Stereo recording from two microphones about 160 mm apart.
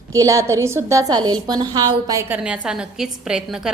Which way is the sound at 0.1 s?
20° right (ahead or behind).